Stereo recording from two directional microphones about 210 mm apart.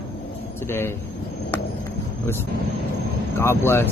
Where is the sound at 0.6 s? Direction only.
10° left (ahead or behind).